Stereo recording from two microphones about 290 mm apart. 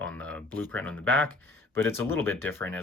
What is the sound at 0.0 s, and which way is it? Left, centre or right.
Speech, centre.